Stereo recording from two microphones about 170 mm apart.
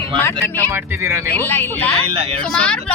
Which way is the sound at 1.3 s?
15° left (ahead or behind).